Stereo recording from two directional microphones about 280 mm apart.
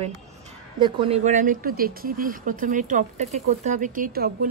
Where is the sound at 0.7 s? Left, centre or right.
Centre.